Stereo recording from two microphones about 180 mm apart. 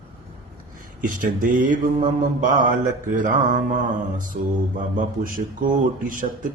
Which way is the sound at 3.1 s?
45° right (ahead or behind).